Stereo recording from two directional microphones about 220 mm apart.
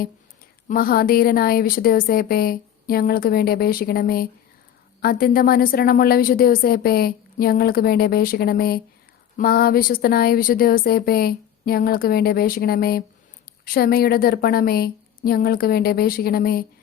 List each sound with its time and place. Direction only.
0.7 s a woman's voice: 40° left (ahead or behind)